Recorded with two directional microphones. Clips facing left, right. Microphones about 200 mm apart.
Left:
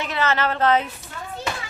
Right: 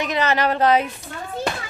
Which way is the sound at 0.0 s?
15° right (ahead or behind).